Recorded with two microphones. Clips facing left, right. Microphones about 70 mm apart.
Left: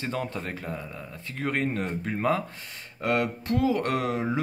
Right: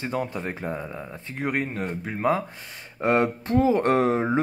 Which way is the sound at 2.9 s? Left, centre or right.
Right.